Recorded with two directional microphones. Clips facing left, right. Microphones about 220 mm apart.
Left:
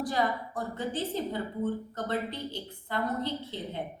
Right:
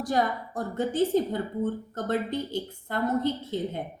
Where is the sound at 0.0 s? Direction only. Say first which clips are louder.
Right 3 dB; 45° right (ahead or behind).